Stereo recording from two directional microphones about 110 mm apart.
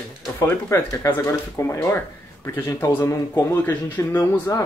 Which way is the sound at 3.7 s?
20° left (ahead or behind).